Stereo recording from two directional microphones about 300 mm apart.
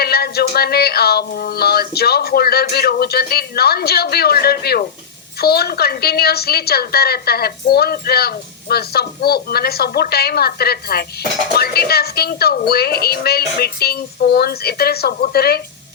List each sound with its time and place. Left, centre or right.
0.0 s a woman's voice: left